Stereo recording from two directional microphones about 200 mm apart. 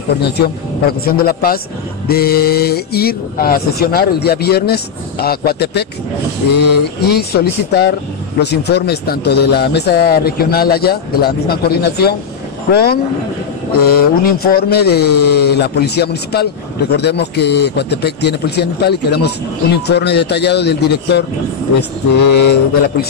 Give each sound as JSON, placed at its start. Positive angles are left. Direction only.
{"t": 0.8, "sound": "a man's voice", "side_deg": 50}
{"t": 22.3, "sound": "a man's voice", "side_deg": 55}